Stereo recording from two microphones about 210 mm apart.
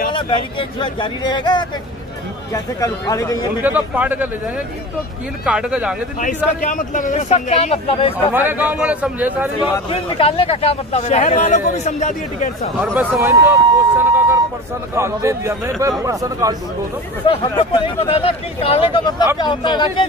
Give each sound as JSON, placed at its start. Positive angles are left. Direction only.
{"t": 0.1, "sound": "speech", "side_deg": 25}
{"t": 3.6, "sound": "a man's voice", "side_deg": -10}
{"t": 5.4, "sound": "speech", "side_deg": -5}
{"t": 6.2, "sound": "speech", "side_deg": 40}
{"t": 8.3, "sound": "a man's voice", "side_deg": -10}
{"t": 9.8, "sound": "speech", "side_deg": 25}
{"t": 12.8, "sound": "a sound", "side_deg": -10}
{"t": 15.0, "sound": "a man's voice", "side_deg": -15}
{"t": 17.3, "sound": "speech", "side_deg": 25}